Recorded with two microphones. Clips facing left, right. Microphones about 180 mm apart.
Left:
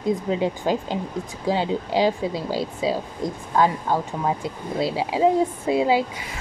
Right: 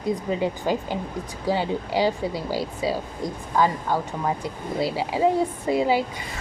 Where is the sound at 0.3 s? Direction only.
20° left (ahead or behind).